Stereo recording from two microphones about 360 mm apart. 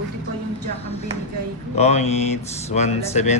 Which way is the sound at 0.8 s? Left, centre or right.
Centre.